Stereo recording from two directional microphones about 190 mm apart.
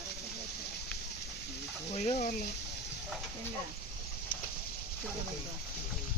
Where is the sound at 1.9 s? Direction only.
35° left (ahead or behind).